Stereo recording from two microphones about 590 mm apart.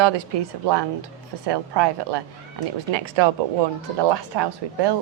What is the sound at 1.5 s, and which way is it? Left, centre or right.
A woman's voice, right.